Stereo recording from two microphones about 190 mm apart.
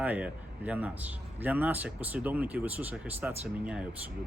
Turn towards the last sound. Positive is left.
turn(degrees=-5)  # may be behind; listen again after turning